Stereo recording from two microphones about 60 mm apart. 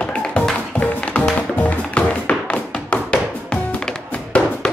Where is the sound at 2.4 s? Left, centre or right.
Left.